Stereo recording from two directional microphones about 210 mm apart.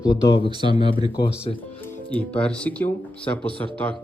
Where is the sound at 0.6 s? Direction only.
20° right (ahead or behind).